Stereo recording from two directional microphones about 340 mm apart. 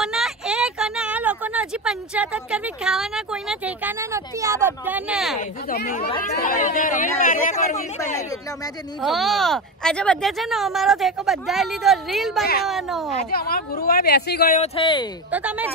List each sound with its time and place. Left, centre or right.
0.0 s speech: centre
5.4 s speech: left
9.0 s speech: centre
13.3 s speech: left
15.3 s speech: centre